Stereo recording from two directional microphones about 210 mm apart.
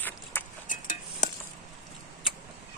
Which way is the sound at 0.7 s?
40° left (ahead or behind).